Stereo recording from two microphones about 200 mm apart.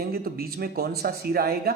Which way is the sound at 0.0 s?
50° right (ahead or behind).